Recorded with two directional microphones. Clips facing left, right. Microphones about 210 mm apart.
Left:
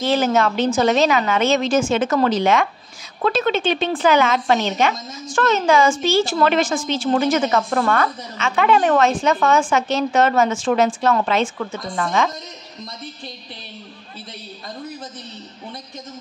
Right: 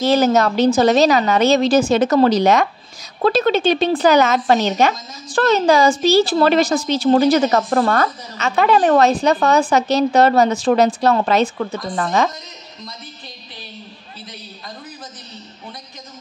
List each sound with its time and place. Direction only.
0.0 s a woman's voice: 40° right (ahead or behind)